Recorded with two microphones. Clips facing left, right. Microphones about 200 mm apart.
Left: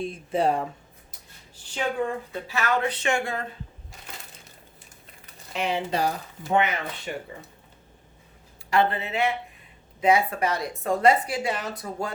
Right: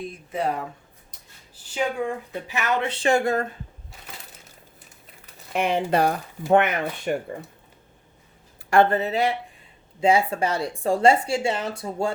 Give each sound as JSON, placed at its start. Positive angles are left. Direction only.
{"t": 0.0, "sound": "speech", "side_deg": 30}
{"t": 1.7, "sound": "speech", "side_deg": -15}
{"t": 5.5, "sound": "speech", "side_deg": -55}
{"t": 8.7, "sound": "speech", "side_deg": -45}